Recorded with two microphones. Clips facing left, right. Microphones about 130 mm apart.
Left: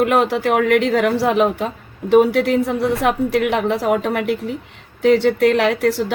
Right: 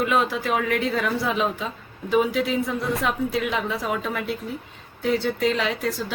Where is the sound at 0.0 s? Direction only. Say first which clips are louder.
Left 6 dB; 60° left (ahead or behind).